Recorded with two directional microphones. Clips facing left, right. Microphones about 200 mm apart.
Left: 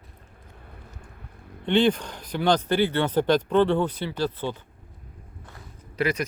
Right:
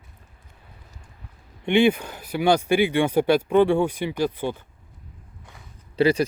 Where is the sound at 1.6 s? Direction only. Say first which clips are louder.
Right 2 dB; 10° right (ahead or behind).